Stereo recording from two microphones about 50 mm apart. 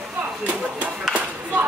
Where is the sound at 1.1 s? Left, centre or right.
Right.